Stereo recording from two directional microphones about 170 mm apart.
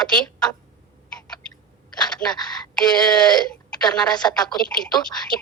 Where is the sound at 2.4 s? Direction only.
25° left (ahead or behind).